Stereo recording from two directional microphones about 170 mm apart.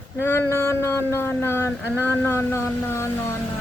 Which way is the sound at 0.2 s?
15° left (ahead or behind).